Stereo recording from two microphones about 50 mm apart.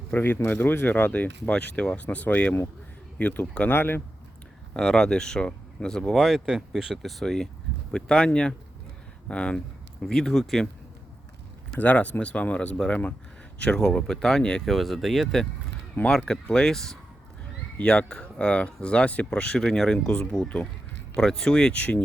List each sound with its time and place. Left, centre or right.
0.1 s speech: left
3.7 s speech: left
4.8 s speech: centre
6.1 s speech: centre
7.0 s speech: centre
7.9 s speech: centre
10.1 s speech: centre
11.8 s speech: left
13.7 s speech: centre
14.6 s speech: centre
17.7 s speech: left
19.6 s speech: centre
21.8 s speech: left